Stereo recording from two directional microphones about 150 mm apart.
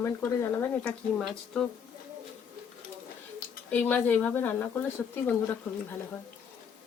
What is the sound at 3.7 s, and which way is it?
Speech, 10° left (ahead or behind).